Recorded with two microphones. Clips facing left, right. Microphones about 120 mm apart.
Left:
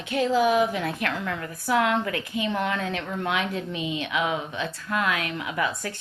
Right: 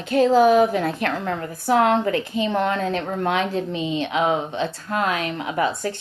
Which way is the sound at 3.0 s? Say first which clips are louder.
Right 5 dB; 50° right (ahead or behind).